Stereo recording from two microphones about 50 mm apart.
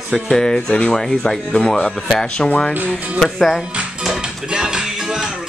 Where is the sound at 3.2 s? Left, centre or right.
Centre.